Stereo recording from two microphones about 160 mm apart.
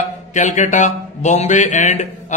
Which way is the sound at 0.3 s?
50° left (ahead or behind).